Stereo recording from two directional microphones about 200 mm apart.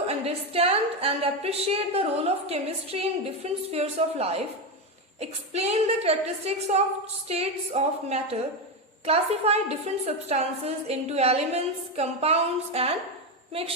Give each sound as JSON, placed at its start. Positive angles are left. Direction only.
{"t": 0.1, "sound": "a woman's voice", "side_deg": -30}